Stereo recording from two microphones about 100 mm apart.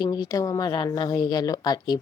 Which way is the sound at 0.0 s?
40° left (ahead or behind).